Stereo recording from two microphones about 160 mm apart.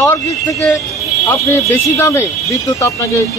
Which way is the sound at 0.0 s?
15° left (ahead or behind).